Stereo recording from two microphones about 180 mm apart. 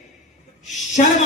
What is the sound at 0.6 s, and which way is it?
Speech, 40° left (ahead or behind).